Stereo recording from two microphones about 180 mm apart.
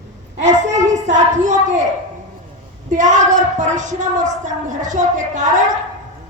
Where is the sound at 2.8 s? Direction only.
45° right (ahead or behind).